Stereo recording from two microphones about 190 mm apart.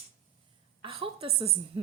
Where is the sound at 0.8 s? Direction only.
30° right (ahead or behind).